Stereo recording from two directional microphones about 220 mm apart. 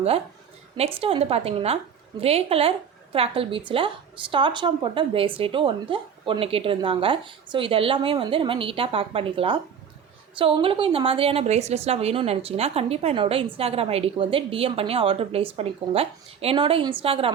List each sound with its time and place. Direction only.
0.8 s a woman's voice: 25° right (ahead or behind)